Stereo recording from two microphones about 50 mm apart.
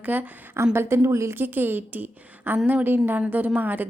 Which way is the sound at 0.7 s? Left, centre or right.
Right.